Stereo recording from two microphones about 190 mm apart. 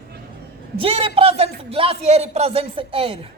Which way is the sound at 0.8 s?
30° right (ahead or behind).